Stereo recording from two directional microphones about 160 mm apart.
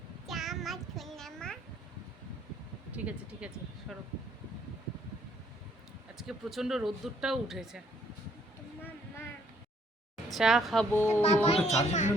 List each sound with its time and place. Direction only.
0.3 s child singing: centre (ahead or behind)
2.9 s speech: 10° right (ahead or behind)
6.1 s speech: centre (ahead or behind)
10.2 s a woman's voice: centre (ahead or behind)
10.9 s a child's voice: 15° left (ahead or behind)
11.4 s a child's voice: 40° left (ahead or behind)